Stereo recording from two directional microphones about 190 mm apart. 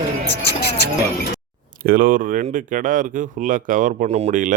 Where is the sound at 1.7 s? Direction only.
50° right (ahead or behind).